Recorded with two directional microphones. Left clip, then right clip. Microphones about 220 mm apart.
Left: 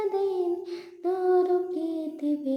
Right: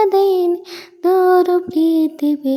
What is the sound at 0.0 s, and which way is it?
Child singing, 45° right (ahead or behind).